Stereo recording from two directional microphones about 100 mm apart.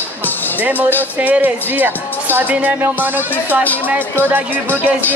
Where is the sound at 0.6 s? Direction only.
15° right (ahead or behind).